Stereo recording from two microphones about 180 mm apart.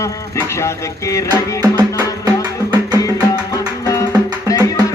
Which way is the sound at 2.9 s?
20° left (ahead or behind).